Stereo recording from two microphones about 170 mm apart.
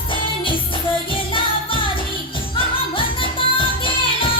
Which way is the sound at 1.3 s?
30° left (ahead or behind).